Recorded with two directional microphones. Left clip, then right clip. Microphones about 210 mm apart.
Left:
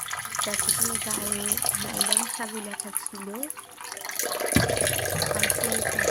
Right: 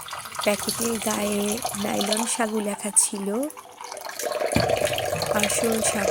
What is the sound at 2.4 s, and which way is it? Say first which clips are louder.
Speech: right 9 dB; 35° right (ahead or behind).